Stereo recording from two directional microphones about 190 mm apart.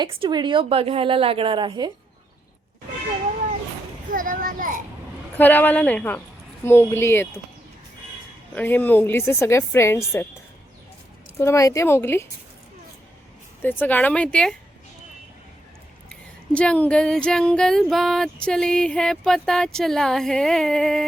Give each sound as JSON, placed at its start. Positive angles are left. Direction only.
{"t": 0.0, "sound": "a woman's voice", "side_deg": -25}
{"t": 4.1, "sound": "a sound", "side_deg": -45}
{"t": 5.4, "sound": "a woman's voice", "side_deg": 10}
{"t": 8.5, "sound": "a woman's voice", "side_deg": 10}
{"t": 11.3, "sound": "a woman's voice", "side_deg": 15}
{"t": 13.6, "sound": "a woman's voice", "side_deg": 10}
{"t": 16.0, "sound": "speech", "side_deg": 5}